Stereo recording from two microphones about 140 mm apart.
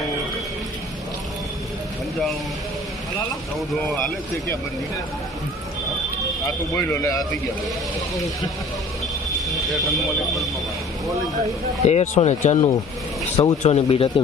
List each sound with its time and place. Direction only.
3.8 s speech: centre (ahead or behind)
6.7 s a man's voice: 20° left (ahead or behind)
9.5 s speech: centre (ahead or behind)
11.9 s speech: 55° left (ahead or behind)